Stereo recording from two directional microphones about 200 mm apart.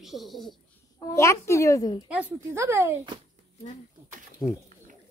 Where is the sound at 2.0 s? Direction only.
5° right (ahead or behind).